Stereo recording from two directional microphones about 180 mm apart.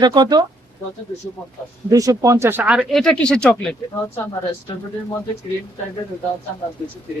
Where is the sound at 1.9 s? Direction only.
20° right (ahead or behind); by 3.7 s 5° left (ahead or behind).